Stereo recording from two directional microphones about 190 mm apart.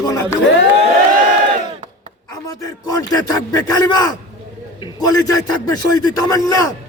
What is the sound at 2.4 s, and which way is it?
A man's voice, 20° left (ahead or behind).